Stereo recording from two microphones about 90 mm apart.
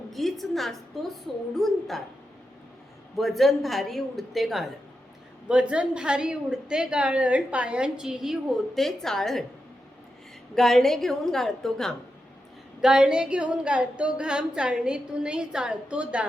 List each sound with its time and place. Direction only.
0.1 s a woman's voice: centre (ahead or behind)
3.2 s a woman's voice: centre (ahead or behind)
5.5 s a woman's voice: 10° right (ahead or behind); by 9.4 s 5° left (ahead or behind)
10.5 s a woman's voice: 5° left (ahead or behind)
12.8 s a woman's voice: 10° right (ahead or behind)